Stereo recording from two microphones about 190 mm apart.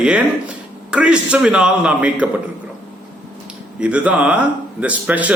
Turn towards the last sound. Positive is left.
turn(degrees=-10)  # may be behind; listen again after turning